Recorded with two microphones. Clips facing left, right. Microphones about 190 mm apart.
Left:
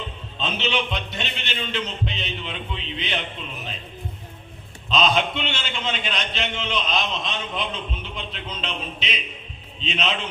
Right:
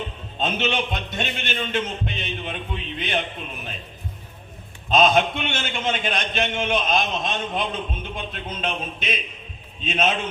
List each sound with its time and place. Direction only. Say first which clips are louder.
0.3 s a man's voice: right 2 dB; 50° right (ahead or behind)
4.9 s a man's voice: right 3 dB; 50° right (ahead or behind)